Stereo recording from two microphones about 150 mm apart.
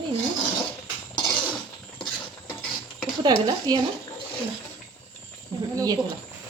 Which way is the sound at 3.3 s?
25° right (ahead or behind).